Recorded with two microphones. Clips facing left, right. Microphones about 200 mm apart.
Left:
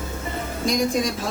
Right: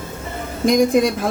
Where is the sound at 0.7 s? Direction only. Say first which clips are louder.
Right 8 dB; 55° right (ahead or behind).